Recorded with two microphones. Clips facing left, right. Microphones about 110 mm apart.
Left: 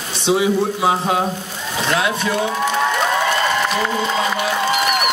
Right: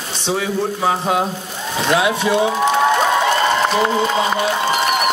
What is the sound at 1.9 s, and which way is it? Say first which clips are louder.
Speech: right 4 dB; 15° right (ahead or behind).